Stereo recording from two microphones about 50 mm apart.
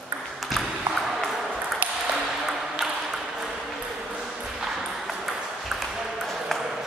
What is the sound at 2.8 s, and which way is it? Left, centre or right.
Ping, centre.